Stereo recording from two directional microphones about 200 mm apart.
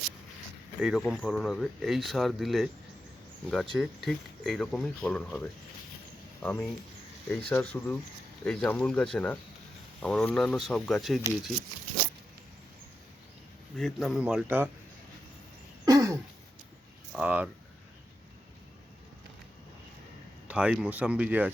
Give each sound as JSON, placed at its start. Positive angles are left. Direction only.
{"t": 0.8, "sound": "speech", "side_deg": -5}
{"t": 13.7, "sound": "speech", "side_deg": 0}
{"t": 15.9, "sound": "a sound", "side_deg": -15}
{"t": 17.1, "sound": "speech", "side_deg": -5}
{"t": 20.5, "sound": "speech", "side_deg": -5}